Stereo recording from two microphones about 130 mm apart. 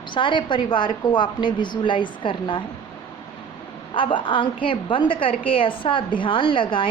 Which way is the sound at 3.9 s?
40° left (ahead or behind).